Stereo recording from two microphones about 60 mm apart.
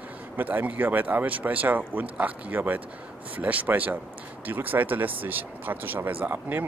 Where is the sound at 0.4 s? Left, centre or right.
Right.